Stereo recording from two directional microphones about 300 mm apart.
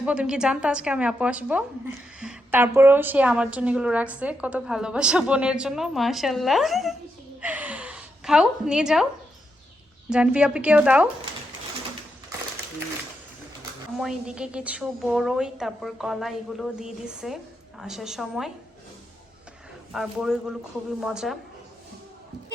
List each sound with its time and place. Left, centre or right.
0.0 s a woman's voice: centre
7.4 s a sound: centre
10.1 s a woman's voice: centre
13.9 s a woman's voice: centre
19.9 s a woman's voice: centre